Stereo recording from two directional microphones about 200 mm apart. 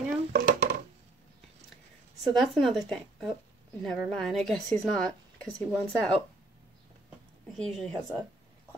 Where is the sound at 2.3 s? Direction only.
Centre (ahead or behind).